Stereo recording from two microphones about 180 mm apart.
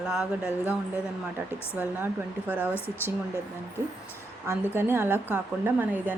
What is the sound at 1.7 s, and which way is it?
Speech, 10° right (ahead or behind).